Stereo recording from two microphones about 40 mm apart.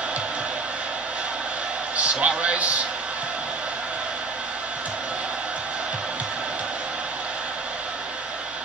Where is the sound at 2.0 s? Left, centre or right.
Right.